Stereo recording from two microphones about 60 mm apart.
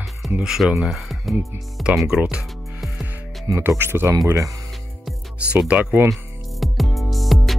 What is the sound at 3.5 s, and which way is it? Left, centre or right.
Speech, right.